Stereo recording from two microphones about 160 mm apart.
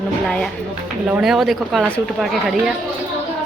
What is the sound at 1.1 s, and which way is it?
Speech, centre (ahead or behind).